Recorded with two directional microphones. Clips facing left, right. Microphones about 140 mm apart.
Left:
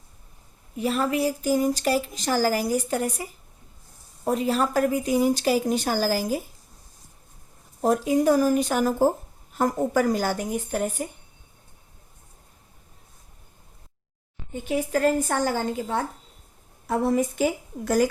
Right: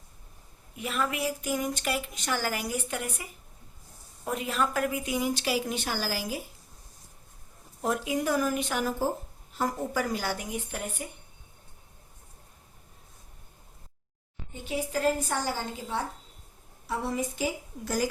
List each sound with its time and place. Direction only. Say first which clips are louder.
0.8 s speech: left 7 dB; 35° left (ahead or behind)
7.8 s speech: left 8 dB; 40° left (ahead or behind)
14.7 s a woman's voice: left 5 dB; 55° left (ahead or behind)